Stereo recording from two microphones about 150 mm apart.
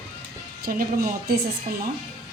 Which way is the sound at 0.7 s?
65° right (ahead or behind).